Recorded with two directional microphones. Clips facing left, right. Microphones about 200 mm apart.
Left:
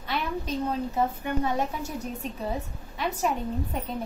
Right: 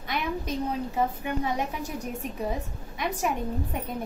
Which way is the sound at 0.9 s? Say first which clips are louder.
Left 1 dB; 15° right (ahead or behind).